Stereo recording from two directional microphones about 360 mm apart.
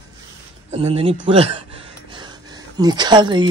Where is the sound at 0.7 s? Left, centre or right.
Centre.